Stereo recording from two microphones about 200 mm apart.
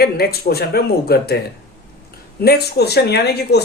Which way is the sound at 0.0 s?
50° left (ahead or behind).